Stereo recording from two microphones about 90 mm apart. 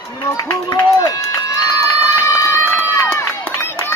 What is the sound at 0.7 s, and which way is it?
Run, 45° left (ahead or behind).